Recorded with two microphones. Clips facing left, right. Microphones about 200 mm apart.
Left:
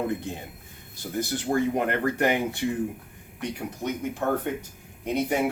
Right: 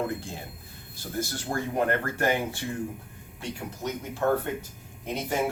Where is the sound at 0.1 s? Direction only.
20° left (ahead or behind).